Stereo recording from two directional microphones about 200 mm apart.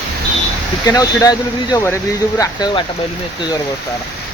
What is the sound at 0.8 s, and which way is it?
Speech, 20° left (ahead or behind).